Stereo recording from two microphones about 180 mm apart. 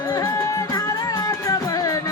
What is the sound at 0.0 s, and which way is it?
Music, 15° left (ahead or behind).